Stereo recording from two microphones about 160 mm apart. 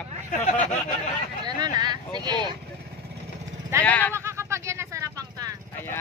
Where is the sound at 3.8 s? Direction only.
10° left (ahead or behind).